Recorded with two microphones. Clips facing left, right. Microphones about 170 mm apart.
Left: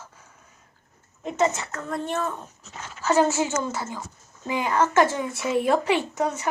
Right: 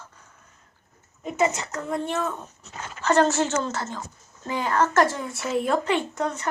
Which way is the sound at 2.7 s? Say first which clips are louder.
Right 1 dB; 5° left (ahead or behind).